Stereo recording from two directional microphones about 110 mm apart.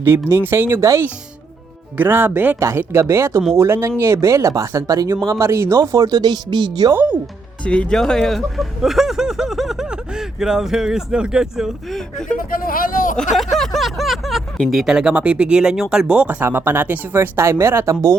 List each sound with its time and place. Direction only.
0.3 s speech: 20° right (ahead or behind); by 6.9 s 40° right (ahead or behind)
7.6 s speech: 10° left (ahead or behind); by 17.9 s 20° right (ahead or behind)